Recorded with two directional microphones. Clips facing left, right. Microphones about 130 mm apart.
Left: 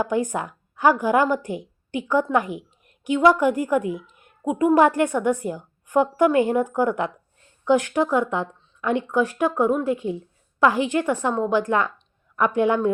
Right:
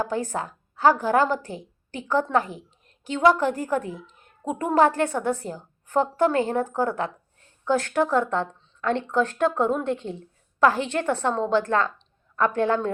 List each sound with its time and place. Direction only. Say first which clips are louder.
0.0 s a woman's voice: left 3 dB; 15° left (ahead or behind)